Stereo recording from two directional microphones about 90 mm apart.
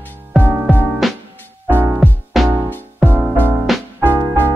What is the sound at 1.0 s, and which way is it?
Music, centre (ahead or behind).